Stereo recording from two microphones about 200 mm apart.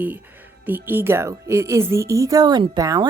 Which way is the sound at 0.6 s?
10° right (ahead or behind).